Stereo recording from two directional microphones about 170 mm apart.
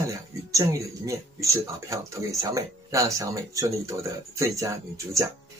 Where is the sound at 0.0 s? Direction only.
20° right (ahead or behind).